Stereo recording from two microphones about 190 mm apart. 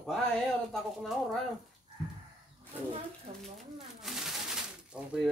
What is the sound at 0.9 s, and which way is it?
Speech, centre (ahead or behind).